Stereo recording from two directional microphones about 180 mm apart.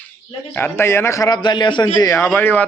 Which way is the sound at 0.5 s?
15° left (ahead or behind).